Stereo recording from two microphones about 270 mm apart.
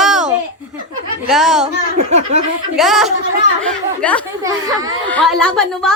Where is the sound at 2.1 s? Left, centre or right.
Right.